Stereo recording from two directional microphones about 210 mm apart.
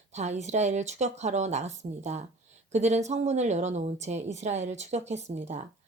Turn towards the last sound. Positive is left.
turn(degrees=-35)  # may be behind; listen again after turning